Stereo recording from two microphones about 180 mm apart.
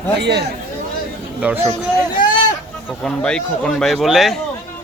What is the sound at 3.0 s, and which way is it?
Speech, 5° left (ahead or behind).